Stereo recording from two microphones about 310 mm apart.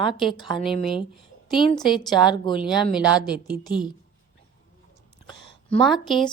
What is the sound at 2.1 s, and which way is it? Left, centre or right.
Speech, centre.